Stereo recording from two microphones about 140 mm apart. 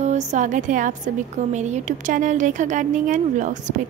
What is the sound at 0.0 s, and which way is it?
A woman's voice, 60° right (ahead or behind).